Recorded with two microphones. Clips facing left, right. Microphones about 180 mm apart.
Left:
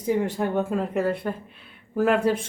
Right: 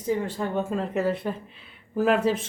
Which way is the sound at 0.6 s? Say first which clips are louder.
Even; 5° left (ahead or behind).